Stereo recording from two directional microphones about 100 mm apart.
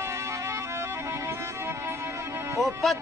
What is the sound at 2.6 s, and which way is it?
Speech, centre (ahead or behind).